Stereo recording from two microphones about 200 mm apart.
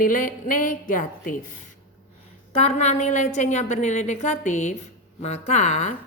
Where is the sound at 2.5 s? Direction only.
35° left (ahead or behind).